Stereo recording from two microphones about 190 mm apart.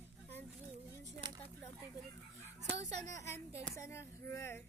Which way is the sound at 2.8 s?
35° right (ahead or behind).